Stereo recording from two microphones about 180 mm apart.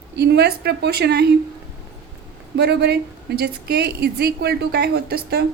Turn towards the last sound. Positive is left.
turn(degrees=-60)  # may be behind; listen again after turning